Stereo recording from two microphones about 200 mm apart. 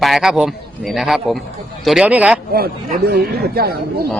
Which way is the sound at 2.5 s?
50° right (ahead or behind).